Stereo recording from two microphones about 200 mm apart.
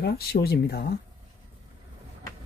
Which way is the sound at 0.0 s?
50° left (ahead or behind).